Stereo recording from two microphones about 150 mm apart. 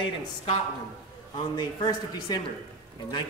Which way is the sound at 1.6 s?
30° left (ahead or behind).